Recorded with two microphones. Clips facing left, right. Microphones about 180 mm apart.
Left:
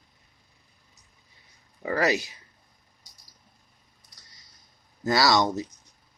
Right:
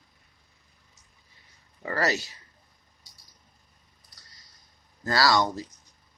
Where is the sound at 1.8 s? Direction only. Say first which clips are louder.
Left 3 dB; 15° left (ahead or behind).